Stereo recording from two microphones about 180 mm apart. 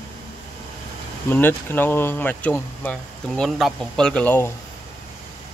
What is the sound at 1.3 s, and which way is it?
Speech, 10° left (ahead or behind).